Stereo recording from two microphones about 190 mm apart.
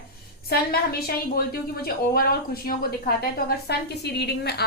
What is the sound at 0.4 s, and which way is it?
A woman's voice, 55° left (ahead or behind).